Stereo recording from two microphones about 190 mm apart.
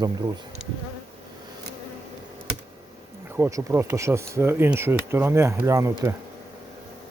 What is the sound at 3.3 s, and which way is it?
Speech, 15° right (ahead or behind).